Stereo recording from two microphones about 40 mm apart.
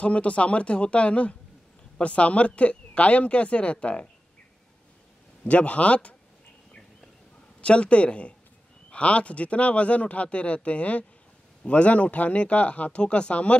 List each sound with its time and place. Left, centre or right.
0.0 s speech: left
5.4 s speech: left
7.6 s speech: left